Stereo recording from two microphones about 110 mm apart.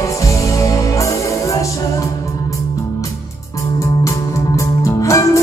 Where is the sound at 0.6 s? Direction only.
30° left (ahead or behind).